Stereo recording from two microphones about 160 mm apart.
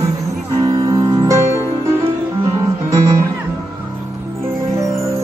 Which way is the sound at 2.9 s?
20° right (ahead or behind).